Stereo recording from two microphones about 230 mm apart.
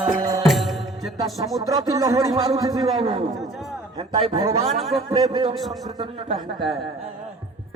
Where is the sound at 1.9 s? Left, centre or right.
Centre.